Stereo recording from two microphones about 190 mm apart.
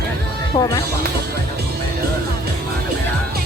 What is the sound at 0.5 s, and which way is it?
Speech, 25° left (ahead or behind).